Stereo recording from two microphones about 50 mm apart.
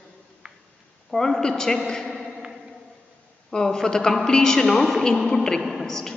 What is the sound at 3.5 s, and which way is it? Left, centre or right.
A man's voice, centre.